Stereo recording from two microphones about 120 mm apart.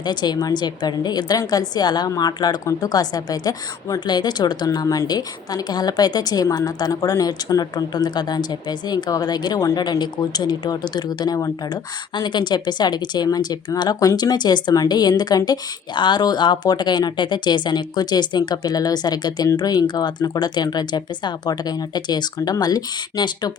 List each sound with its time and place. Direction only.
0.0 s a woman's voice: 35° left (ahead or behind)